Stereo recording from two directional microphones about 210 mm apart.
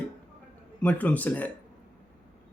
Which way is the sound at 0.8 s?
5° left (ahead or behind).